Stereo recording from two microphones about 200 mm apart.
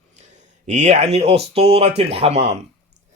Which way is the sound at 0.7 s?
35° right (ahead or behind).